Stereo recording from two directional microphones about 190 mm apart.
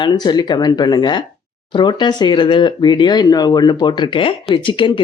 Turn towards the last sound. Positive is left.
turn(degrees=25)  # may be behind; listen again after turning